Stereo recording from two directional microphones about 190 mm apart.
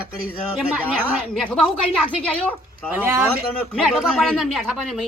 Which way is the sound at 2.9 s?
10° right (ahead or behind).